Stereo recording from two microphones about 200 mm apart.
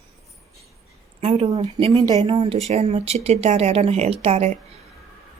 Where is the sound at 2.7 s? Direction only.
30° right (ahead or behind).